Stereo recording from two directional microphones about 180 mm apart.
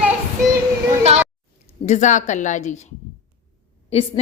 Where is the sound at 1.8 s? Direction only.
40° left (ahead or behind).